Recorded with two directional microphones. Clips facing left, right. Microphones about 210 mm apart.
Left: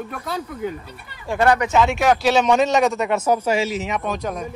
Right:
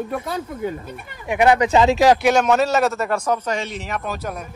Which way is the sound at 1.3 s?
20° right (ahead or behind).